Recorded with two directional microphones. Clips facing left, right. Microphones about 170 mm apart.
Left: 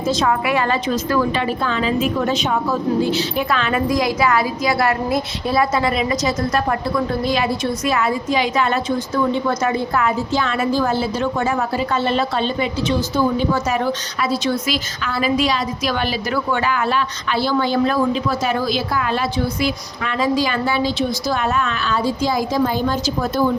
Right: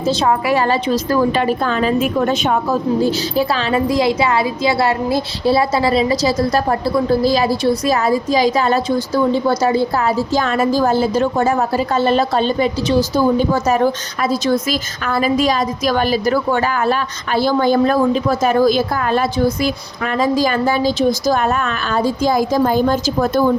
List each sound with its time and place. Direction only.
0.0 s a woman's voice: 30° right (ahead or behind); by 2.7 s 55° right (ahead or behind)
3.0 s a woman's voice: 40° right (ahead or behind)